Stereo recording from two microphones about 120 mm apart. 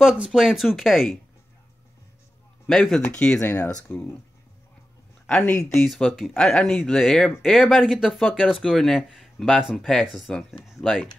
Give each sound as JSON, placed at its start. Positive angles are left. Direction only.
{"t": 0.0, "sound": "speech", "side_deg": -5}
{"t": 2.7, "sound": "speech", "side_deg": 5}
{"t": 5.2, "sound": "speech", "side_deg": 5}